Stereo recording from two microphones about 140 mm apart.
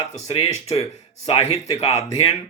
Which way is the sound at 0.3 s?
25° left (ahead or behind).